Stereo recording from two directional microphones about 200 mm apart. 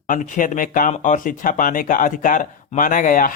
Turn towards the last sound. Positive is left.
turn(degrees=45)  # may be behind; listen again after turning